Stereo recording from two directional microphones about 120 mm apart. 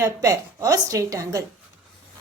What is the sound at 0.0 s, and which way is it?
A woman's voice, 25° right (ahead or behind).